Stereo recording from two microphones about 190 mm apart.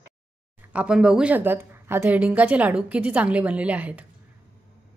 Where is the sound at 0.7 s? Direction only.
5° right (ahead or behind).